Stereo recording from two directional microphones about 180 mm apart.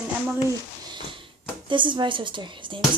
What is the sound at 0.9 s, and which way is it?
A woman's voice, 25° right (ahead or behind).